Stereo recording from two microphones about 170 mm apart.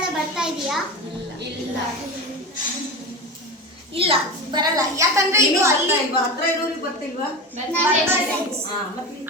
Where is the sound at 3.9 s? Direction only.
35° right (ahead or behind); by 5.7 s 15° right (ahead or behind).